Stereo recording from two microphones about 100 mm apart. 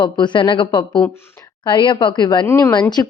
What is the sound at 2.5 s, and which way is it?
Speech, 25° left (ahead or behind).